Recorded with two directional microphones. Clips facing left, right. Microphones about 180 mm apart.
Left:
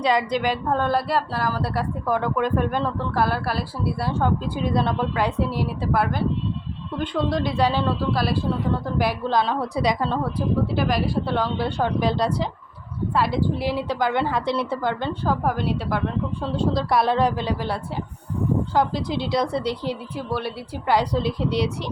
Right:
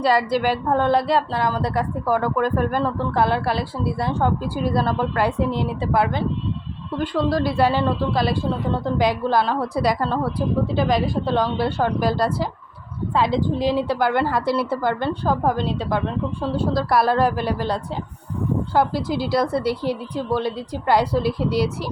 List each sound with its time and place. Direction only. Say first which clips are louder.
0.0 s a woman's voice: right 2 dB; 5° right (ahead or behind)
0.7 s a woman's voice: right 4 dB; 15° right (ahead or behind)
0.9 s a woman's voice: right 3 dB; 5° left (ahead or behind)
1.7 s a woman's voice: right 3 dB; 15° right (ahead or behind)
2.1 s a woman's voice: right 2 dB; 5° right (ahead or behind)
3.2 s a woman's voice: right 3 dB; 20° right (ahead or behind)
4.1 s a woman's voice: right 1 dB; 10° right (ahead or behind)
7.0 s a woman's voice: right 3 dB; 5° right (ahead or behind)
10.7 s a woman's voice: right 3 dB; 20° right (ahead or behind); by 12.5 s 5° right (ahead or behind)
13.3 s a woman's voice: right 3 dB; 15° right (ahead or behind)
16.4 s a woman's voice: right 1 dB; 5° right (ahead or behind)
18.7 s a woman's voice: right 2 dB; 5° right (ahead or behind)